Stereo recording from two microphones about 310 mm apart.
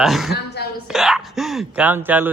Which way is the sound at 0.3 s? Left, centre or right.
Left.